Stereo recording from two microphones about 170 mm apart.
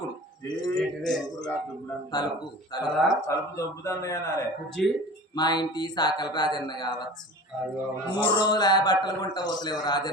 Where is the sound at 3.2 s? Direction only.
15° left (ahead or behind).